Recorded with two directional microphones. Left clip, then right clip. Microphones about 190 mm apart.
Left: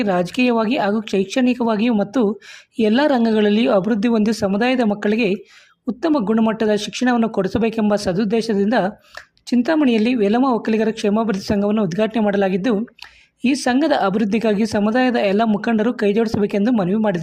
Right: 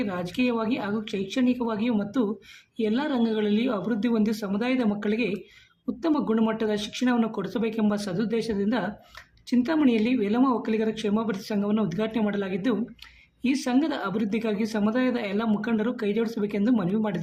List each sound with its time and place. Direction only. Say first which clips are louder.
0.0 s speech: left 10 dB; 40° left (ahead or behind)